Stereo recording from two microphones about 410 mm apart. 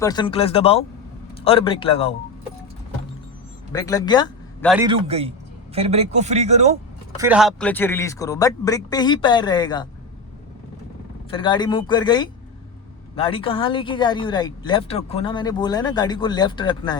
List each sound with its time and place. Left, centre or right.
0.0 s speech: centre
3.7 s speech: centre
4.7 s speech: centre
7.2 s speech: centre
11.3 s speech: centre